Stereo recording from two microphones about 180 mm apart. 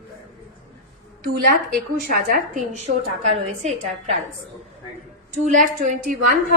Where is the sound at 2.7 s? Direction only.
40° right (ahead or behind).